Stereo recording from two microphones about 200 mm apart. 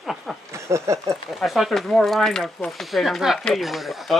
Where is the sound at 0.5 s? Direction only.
15° right (ahead or behind).